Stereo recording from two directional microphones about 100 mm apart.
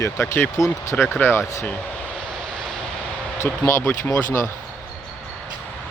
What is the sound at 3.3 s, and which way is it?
Speech, 25° left (ahead or behind).